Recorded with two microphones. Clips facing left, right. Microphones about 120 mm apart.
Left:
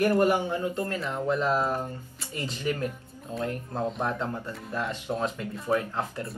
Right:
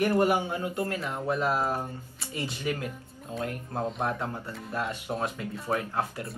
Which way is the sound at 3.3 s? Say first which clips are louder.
Left 2 dB; centre (ahead or behind).